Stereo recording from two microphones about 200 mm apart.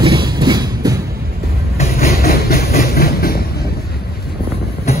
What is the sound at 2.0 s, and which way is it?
Train, 50° left (ahead or behind).